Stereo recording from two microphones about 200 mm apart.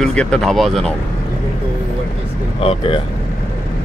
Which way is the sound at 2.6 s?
30° left (ahead or behind).